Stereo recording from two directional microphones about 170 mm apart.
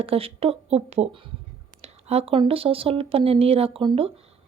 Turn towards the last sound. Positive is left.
turn(degrees=-35)  # may be behind; listen again after turning